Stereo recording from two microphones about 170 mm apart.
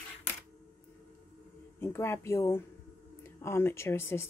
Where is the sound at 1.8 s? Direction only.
15° left (ahead or behind).